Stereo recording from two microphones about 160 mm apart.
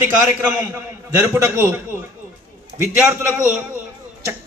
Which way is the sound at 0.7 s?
15° right (ahead or behind).